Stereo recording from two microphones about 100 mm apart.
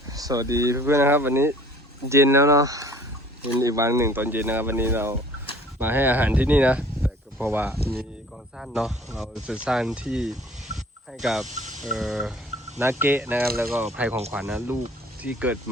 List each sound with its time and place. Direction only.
0.1 s speech: 40° right (ahead or behind); by 7.8 s 20° right (ahead or behind)
8.5 s speech: 5° right (ahead or behind)
10.8 s a sound: centre (ahead or behind)
12.8 s speech: 20° right (ahead or behind)
13.8 s speech: 10° right (ahead or behind)